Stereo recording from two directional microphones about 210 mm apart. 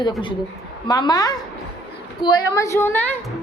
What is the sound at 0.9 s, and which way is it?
A woman's voice, 20° left (ahead or behind).